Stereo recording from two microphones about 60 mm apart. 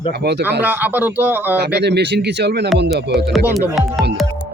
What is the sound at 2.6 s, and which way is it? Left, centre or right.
Speech, centre.